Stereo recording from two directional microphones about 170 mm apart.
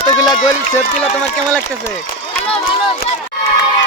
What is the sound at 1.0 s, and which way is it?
Speech, 5° left (ahead or behind).